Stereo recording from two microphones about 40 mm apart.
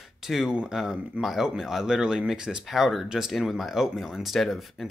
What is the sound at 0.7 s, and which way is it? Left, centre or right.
Speech, centre.